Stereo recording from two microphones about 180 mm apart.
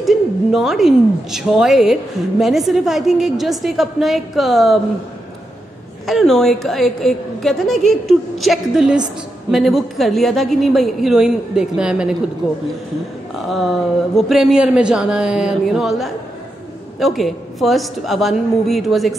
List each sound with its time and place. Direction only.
0.0 s a woman's voice: centre (ahead or behind)
6.0 s a woman's voice: centre (ahead or behind)
13.4 s a woman's voice: centre (ahead or behind)